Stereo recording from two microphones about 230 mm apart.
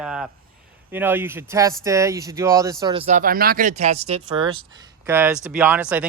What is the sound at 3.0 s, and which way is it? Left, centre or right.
Speech, right.